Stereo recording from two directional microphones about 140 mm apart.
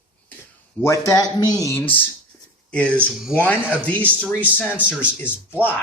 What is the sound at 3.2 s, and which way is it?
Speech, 5° right (ahead or behind).